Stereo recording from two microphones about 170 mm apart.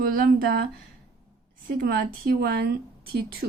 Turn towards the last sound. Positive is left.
turn(degrees=-70)  # may be behind; listen again after turning